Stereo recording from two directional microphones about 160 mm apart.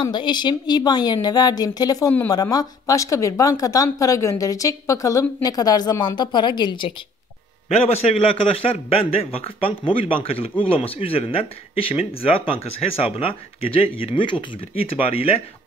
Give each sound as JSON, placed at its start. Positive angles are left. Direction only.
{"t": 0.0, "sound": "speech", "side_deg": 30}
{"t": 7.7, "sound": "speech", "side_deg": 40}